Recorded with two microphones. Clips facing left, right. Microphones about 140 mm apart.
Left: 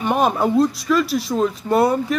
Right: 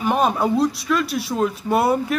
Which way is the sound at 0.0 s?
Centre (ahead or behind).